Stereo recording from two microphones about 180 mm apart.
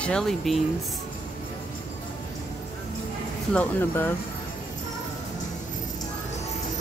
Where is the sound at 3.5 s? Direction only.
10° left (ahead or behind).